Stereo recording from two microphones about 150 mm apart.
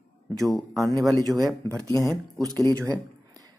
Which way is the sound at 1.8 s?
20° left (ahead or behind).